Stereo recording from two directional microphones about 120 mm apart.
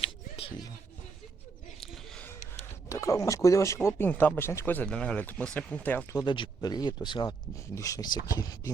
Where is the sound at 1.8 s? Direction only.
5° left (ahead or behind).